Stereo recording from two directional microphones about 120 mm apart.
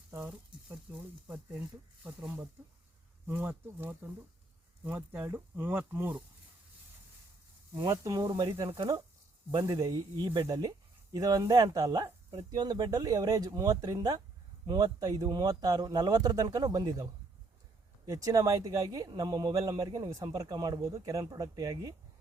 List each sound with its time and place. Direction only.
0.3 s speech: 15° right (ahead or behind)
7.9 s a man's voice: 30° right (ahead or behind); by 8.9 s 45° right (ahead or behind)
9.6 s a man's voice: 35° right (ahead or behind)